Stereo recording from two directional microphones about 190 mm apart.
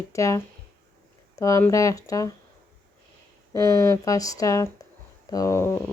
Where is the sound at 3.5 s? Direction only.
15° left (ahead or behind).